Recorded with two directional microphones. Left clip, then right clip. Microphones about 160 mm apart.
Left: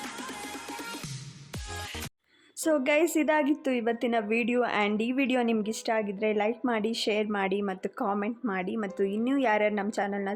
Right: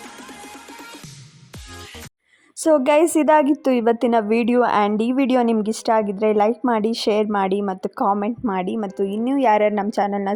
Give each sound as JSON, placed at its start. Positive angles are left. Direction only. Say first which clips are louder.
{"t": 2.6, "sound": "speech", "louder": "right 10 dB", "side_deg": -30}